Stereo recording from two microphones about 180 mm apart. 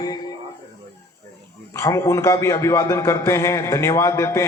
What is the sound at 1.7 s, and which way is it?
A man's voice, 15° left (ahead or behind).